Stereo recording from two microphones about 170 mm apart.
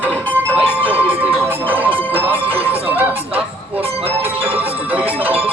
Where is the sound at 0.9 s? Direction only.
35° right (ahead or behind).